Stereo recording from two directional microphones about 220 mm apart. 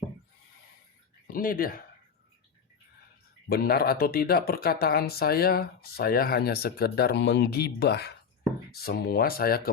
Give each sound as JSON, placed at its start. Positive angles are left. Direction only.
{"t": 1.3, "sound": "speech", "side_deg": 40}
{"t": 3.5, "sound": "speech", "side_deg": 45}